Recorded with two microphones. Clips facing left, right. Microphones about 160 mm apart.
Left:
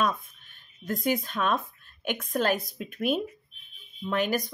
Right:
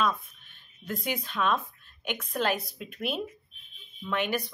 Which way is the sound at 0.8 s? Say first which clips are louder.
Left 6 dB; 45° left (ahead or behind).